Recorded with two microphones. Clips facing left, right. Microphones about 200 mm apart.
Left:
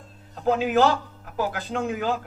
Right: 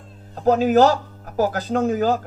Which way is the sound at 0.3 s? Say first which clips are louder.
Right 5 dB; 40° right (ahead or behind).